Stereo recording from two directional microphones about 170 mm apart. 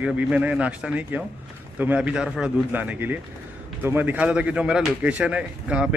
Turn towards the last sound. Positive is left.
turn(degrees=-5)  # may be behind; listen again after turning